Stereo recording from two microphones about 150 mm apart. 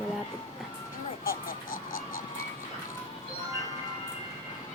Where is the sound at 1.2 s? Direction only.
70° left (ahead or behind).